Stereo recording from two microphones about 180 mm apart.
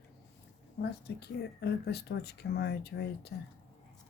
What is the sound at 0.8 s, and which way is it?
Speech, 65° left (ahead or behind).